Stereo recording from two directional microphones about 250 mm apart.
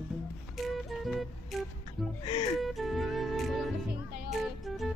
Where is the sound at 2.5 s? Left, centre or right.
Centre.